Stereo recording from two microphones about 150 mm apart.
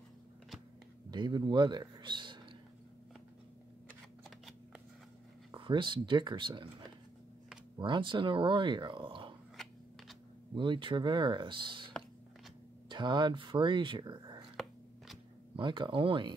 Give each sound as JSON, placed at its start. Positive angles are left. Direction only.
{"t": 1.1, "sound": "a man's voice", "side_deg": -30}
{"t": 5.5, "sound": "speech", "side_deg": -35}
{"t": 7.8, "sound": "speech", "side_deg": -35}
{"t": 10.5, "sound": "speech", "side_deg": -30}
{"t": 15.5, "sound": "speech", "side_deg": -30}